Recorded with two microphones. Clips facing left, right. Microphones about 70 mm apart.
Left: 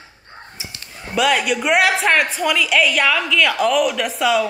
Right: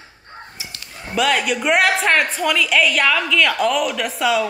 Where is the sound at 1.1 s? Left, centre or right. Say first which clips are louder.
Left 1 dB; centre.